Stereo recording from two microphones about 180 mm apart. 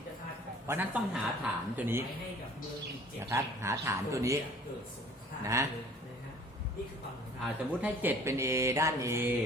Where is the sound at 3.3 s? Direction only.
15° right (ahead or behind).